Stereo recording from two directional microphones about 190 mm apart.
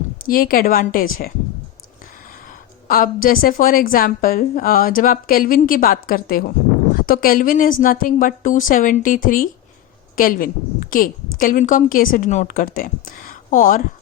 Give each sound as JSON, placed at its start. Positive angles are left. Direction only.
{"t": 0.3, "sound": "a woman's voice", "side_deg": 50}
{"t": 2.8, "sound": "a woman's voice", "side_deg": 50}